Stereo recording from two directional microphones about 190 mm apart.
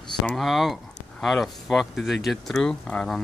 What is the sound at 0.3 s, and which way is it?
Speech, centre (ahead or behind).